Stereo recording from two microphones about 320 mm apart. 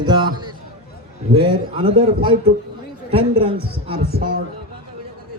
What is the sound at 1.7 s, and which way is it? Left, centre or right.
Speech, centre.